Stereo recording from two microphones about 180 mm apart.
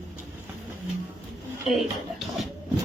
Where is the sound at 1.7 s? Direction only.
Centre (ahead or behind).